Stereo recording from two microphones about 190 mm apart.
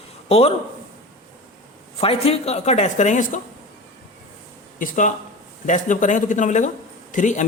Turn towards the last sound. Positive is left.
turn(degrees=40)  # may be behind; listen again after turning